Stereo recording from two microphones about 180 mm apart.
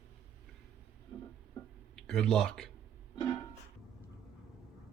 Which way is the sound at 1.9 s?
5° left (ahead or behind).